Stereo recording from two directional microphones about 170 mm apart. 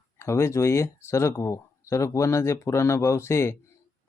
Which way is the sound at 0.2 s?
15° left (ahead or behind).